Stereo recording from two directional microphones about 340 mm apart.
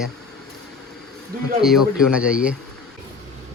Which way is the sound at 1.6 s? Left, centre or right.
Centre.